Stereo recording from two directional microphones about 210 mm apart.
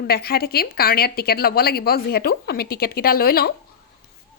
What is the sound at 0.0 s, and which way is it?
A woman's voice, 45° left (ahead or behind).